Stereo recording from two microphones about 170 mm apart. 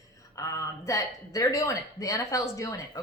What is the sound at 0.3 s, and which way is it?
A woman's voice, 20° left (ahead or behind).